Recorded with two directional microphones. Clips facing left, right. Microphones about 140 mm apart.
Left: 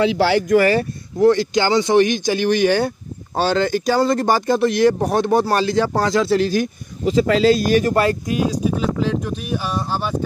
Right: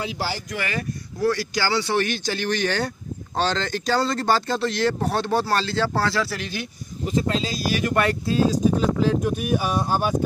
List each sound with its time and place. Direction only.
0.0 s speech: 80° left
0.6 s speech: 35° left (ahead or behind)
1.2 s speech: 20° left (ahead or behind)
6.4 s speech: 40° left (ahead or behind)
7.1 s speech: 90° left
7.6 s speech: 45° left (ahead or behind)
7.9 s speech: 25° left (ahead or behind)
9.0 s speech: 10° right (ahead or behind)